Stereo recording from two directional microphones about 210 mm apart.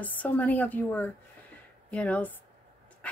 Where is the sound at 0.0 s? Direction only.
10° left (ahead or behind).